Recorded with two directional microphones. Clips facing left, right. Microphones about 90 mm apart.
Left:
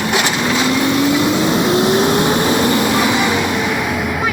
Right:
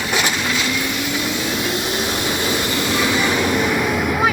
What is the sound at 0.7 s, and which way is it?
Vehicle, 55° left (ahead or behind).